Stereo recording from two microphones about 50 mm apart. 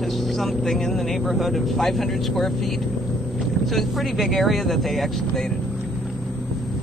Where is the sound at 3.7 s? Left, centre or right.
Centre.